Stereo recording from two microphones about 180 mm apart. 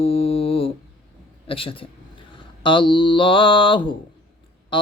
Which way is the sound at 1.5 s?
30° left (ahead or behind).